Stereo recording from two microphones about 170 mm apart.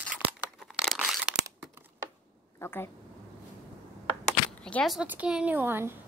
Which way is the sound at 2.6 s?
15° left (ahead or behind).